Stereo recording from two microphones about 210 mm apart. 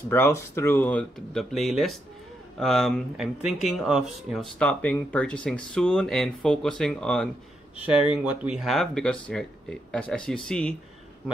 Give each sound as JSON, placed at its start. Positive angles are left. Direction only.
{"t": 0.1, "sound": "speech", "side_deg": 10}